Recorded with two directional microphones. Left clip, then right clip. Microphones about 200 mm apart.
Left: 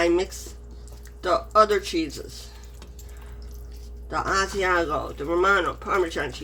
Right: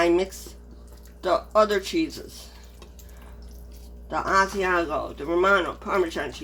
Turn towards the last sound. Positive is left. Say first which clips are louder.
# left 1 dB
turn(degrees=-10)  # may be behind; listen again after turning